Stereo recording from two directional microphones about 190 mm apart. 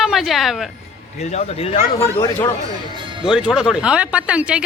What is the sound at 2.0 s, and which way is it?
Speech, 15° left (ahead or behind).